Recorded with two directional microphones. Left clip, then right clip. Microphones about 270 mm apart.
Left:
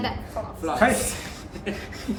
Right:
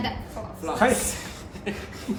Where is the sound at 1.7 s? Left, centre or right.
Centre.